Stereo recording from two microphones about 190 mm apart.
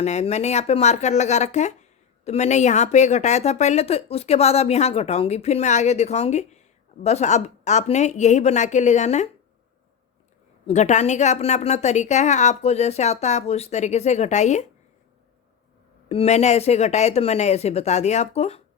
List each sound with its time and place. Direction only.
0.0 s speech: 35° left (ahead or behind)
10.7 s speech: 35° left (ahead or behind)
16.0 s speech: 35° left (ahead or behind)